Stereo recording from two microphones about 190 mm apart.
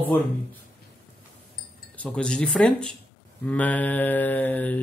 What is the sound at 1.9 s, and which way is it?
Speech, 5° left (ahead or behind).